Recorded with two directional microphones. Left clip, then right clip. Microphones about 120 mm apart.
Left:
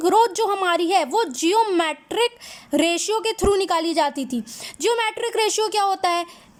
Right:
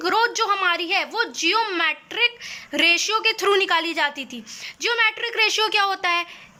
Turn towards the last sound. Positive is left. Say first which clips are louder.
# left 1 dB
turn(degrees=50)  # may be behind; listen again after turning